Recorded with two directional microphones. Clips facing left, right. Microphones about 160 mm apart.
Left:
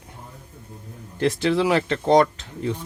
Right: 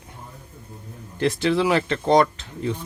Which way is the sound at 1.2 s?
40° left (ahead or behind).